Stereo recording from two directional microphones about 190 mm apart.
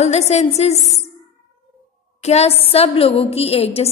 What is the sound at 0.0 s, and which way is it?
A woman's voice, 35° left (ahead or behind).